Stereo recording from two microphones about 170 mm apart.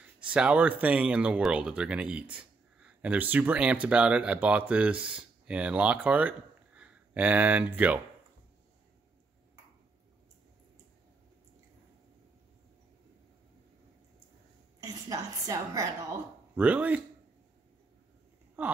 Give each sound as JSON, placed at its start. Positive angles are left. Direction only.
{"t": 0.3, "sound": "speech", "side_deg": -5}
{"t": 14.8, "sound": "a sound", "side_deg": -20}
{"t": 16.5, "sound": "speech", "side_deg": -10}
{"t": 18.6, "sound": "speech", "side_deg": -10}